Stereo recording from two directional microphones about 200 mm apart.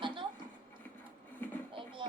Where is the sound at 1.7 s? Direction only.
25° right (ahead or behind).